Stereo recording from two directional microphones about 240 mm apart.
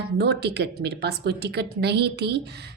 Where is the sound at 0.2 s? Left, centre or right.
Right.